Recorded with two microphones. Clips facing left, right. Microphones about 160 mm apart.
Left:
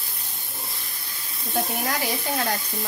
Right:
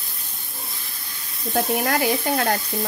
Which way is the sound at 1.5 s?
60° right (ahead or behind).